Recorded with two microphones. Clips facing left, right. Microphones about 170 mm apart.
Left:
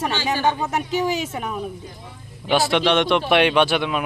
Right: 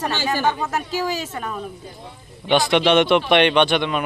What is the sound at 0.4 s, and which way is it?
Speech, 20° left (ahead or behind).